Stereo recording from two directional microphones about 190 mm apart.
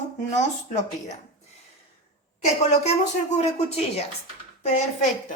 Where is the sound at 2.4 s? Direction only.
35° left (ahead or behind).